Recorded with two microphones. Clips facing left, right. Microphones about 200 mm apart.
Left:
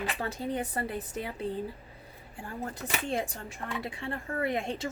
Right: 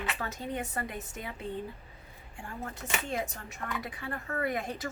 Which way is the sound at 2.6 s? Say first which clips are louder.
Left 2 dB; 35° left (ahead or behind).